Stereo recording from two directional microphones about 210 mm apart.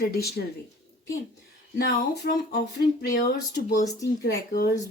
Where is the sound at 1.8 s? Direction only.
50° left (ahead or behind).